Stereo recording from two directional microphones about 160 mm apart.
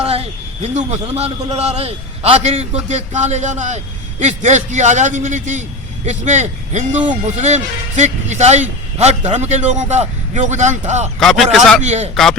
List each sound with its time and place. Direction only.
0.0 s a man's voice: 40° right (ahead or behind)
11.2 s a man's voice: centre (ahead or behind)
11.8 s a man's voice: 45° right (ahead or behind)
12.1 s a man's voice: 5° left (ahead or behind)